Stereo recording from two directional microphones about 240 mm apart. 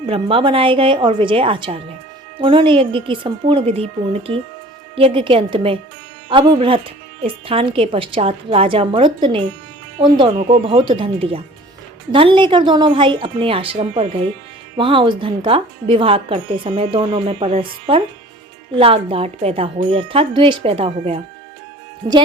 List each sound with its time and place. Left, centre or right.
0.0 s speech: right